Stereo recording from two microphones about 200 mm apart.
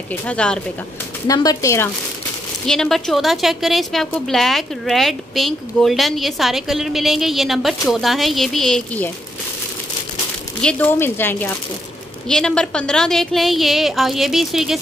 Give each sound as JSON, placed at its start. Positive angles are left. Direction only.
{"t": 0.1, "sound": "a woman's voice", "side_deg": 5}
{"t": 1.2, "sound": "speech", "side_deg": 15}
{"t": 2.6, "sound": "a woman's voice", "side_deg": 0}
{"t": 10.6, "sound": "a woman's voice", "side_deg": 5}